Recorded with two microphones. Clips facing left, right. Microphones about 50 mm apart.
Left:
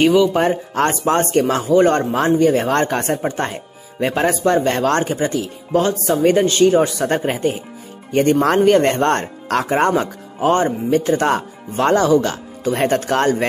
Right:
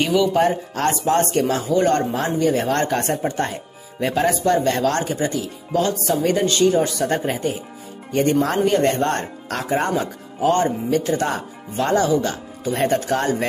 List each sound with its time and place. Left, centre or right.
0.0 s speech: left
8.2 s speech: left
10.5 s speech: left
11.1 s speech: left
11.7 s speech: left